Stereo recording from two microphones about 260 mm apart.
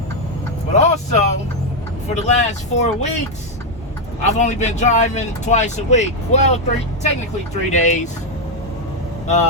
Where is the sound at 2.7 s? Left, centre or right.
Left.